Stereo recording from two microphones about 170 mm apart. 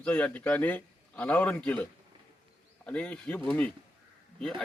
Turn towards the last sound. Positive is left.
turn(degrees=5)  # may be behind; listen again after turning